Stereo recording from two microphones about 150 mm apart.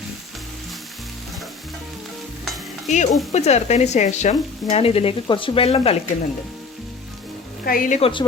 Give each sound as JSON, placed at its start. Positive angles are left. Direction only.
{"t": 2.9, "sound": "speech", "side_deg": 55}
{"t": 7.6, "sound": "a woman's voice", "side_deg": 70}
{"t": 8.0, "sound": "speech", "side_deg": 35}